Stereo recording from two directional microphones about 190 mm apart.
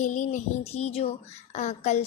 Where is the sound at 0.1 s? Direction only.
40° left (ahead or behind).